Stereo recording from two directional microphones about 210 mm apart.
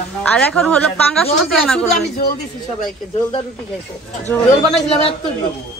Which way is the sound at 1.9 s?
45° left (ahead or behind).